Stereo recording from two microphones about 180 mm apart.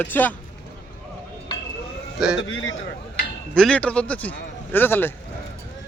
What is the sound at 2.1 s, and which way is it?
Speech, 5° right (ahead or behind).